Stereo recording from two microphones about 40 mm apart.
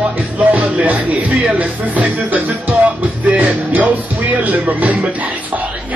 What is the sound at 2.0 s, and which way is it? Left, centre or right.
Music, right.